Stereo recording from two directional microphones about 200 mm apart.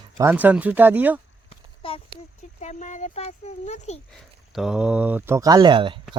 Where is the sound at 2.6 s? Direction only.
40° left (ahead or behind).